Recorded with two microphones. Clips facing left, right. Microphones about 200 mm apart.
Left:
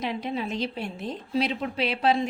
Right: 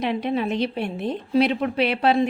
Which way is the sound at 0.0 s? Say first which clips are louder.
Right 6 dB; 60° right (ahead or behind).